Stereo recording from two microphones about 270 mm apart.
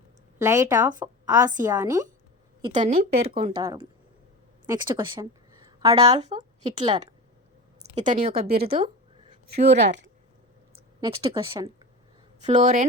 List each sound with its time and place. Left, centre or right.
0.3 s a woman's voice: centre
8.0 s speech: right
11.0 s a woman's voice: centre